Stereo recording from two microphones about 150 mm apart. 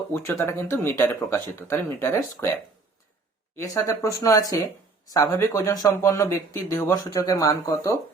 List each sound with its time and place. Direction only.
0.1 s speech: 20° left (ahead or behind)
3.5 s speech: 20° left (ahead or behind)